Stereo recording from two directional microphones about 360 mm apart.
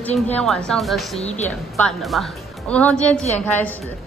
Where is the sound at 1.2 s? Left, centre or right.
Centre.